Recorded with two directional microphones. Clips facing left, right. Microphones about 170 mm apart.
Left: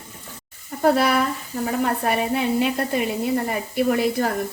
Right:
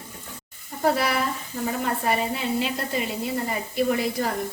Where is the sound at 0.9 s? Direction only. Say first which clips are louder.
Left 5 dB; 60° left (ahead or behind).